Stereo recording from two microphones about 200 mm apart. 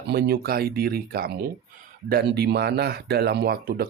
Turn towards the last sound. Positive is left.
turn(degrees=-50)  # may be behind; listen again after turning